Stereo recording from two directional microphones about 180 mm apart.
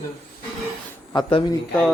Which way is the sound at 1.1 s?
25° left (ahead or behind).